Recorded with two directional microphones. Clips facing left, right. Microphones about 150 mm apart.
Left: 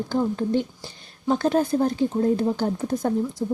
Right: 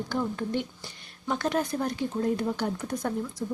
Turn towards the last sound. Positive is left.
turn(degrees=30)  # may be behind; listen again after turning